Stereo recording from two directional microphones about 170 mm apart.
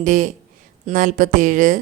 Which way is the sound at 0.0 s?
50° right (ahead or behind).